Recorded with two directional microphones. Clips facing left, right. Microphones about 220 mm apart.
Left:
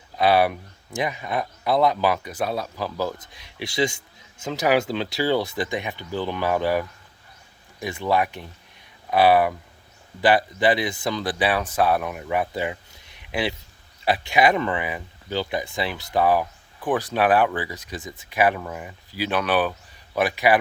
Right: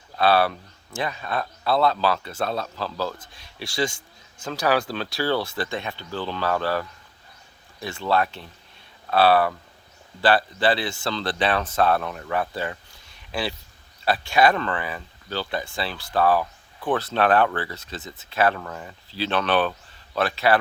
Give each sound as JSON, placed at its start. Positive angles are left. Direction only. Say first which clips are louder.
{"t": 0.2, "sound": "speech", "louder": "left 1 dB", "side_deg": 15}